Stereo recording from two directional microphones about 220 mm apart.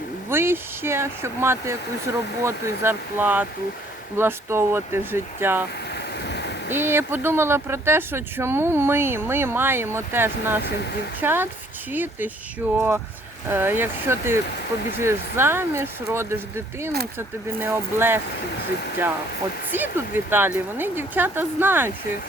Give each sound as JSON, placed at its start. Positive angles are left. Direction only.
{"t": 0.3, "sound": "speech", "side_deg": -10}
{"t": 6.1, "sound": "a sound", "side_deg": 50}
{"t": 6.7, "sound": "speech", "side_deg": -10}
{"t": 19.7, "sound": "speech", "side_deg": -10}